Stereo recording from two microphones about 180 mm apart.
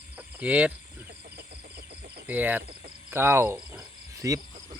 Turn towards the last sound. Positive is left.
turn(degrees=-10)  # may be behind; listen again after turning